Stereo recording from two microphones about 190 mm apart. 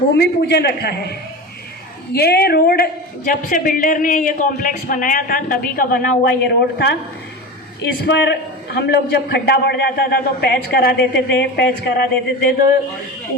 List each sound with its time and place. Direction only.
0.2 s a man's voice: 60° left (ahead or behind)
2.1 s a woman's voice: 55° left (ahead or behind)